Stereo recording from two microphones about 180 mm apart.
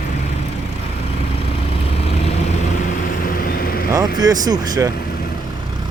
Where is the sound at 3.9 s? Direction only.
20° right (ahead or behind).